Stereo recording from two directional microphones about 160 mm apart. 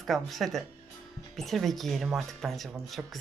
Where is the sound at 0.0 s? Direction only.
Centre (ahead or behind).